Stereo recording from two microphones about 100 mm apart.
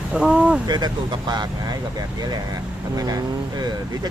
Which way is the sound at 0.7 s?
45° right (ahead or behind).